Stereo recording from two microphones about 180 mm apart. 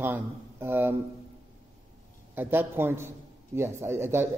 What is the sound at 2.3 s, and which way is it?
A man's voice, 10° right (ahead or behind).